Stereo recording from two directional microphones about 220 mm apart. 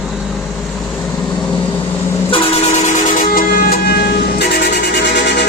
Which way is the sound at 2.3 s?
25° left (ahead or behind).